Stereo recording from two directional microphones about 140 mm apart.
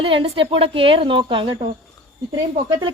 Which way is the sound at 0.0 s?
40° right (ahead or behind).